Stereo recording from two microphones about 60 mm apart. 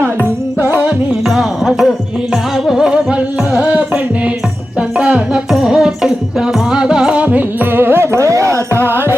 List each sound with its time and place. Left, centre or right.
1.2 s music: centre; by 7.4 s right
7.6 s music: right